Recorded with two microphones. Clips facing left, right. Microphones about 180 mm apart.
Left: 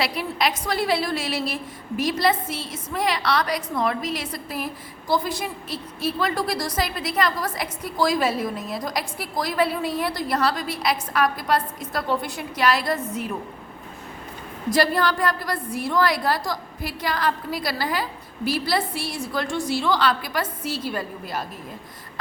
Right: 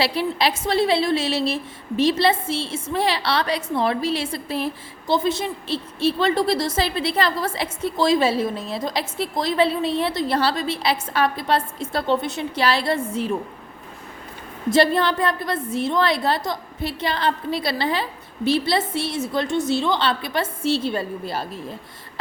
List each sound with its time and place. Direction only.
0.0 s a woman's voice: 30° right (ahead or behind)
14.7 s a woman's voice: 25° right (ahead or behind)